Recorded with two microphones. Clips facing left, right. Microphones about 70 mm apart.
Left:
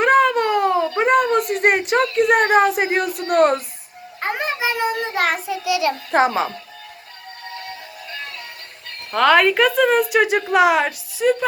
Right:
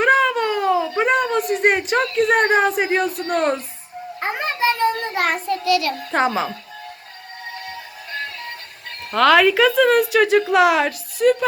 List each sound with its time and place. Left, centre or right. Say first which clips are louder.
0.0 s a sound: left 1 dB; centre
0.9 s a woman's voice: left 2 dB; centre
5.6 s a child's voice: even; centre
6.1 s a woman's voice: left 2 dB; centre
9.1 s a woman's voice: right 1 dB; centre